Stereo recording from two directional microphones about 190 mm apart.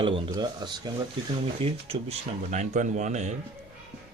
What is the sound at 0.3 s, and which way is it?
Speech, 20° right (ahead or behind).